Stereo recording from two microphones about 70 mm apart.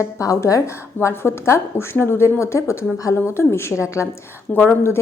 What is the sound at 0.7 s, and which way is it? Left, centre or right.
A woman's voice, left.